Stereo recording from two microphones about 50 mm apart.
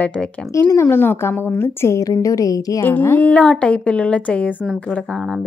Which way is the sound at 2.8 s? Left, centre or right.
Left.